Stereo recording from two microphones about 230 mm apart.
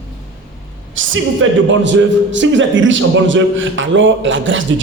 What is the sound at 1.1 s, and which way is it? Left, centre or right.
A man's voice, right.